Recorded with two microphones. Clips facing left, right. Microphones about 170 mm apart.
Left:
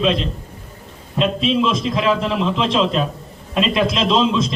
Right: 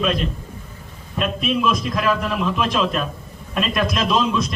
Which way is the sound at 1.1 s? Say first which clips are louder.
Left 4 dB; 25° left (ahead or behind).